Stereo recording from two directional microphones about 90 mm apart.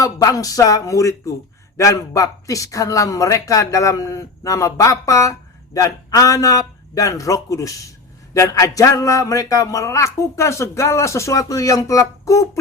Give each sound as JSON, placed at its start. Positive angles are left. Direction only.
{"t": 0.0, "sound": "a man's voice", "side_deg": 40}